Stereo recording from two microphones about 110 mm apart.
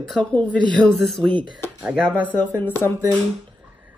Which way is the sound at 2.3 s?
15° left (ahead or behind).